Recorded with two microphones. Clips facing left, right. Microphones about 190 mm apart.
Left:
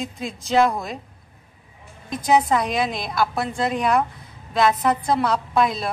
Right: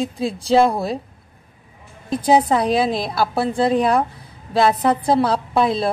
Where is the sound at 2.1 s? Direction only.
30° right (ahead or behind).